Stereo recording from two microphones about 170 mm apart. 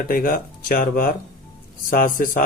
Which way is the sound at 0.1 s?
55° left (ahead or behind).